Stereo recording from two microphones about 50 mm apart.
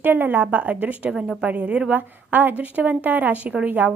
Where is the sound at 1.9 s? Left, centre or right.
Right.